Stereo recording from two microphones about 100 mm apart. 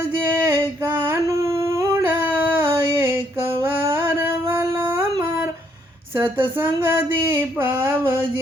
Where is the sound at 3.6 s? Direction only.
25° right (ahead or behind).